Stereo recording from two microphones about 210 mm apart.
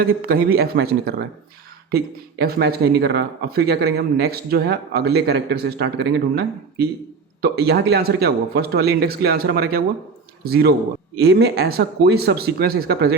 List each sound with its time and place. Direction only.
0.0 s speech: 45° right (ahead or behind)
2.4 s speech: 45° right (ahead or behind)